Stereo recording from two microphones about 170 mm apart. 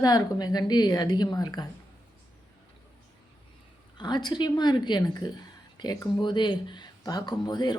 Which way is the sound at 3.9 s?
25° left (ahead or behind).